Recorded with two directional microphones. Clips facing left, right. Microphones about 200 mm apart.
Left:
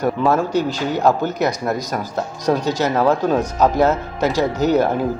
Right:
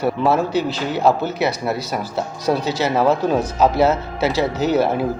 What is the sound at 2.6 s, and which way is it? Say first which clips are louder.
Speech: left 1 dB; 15° left (ahead or behind).